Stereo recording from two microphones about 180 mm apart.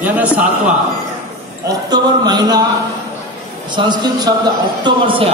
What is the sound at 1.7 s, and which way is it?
Speech, 25° right (ahead or behind).